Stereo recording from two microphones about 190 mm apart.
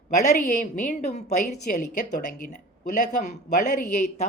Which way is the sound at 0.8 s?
35° left (ahead or behind).